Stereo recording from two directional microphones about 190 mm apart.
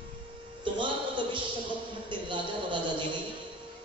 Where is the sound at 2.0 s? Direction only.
25° right (ahead or behind).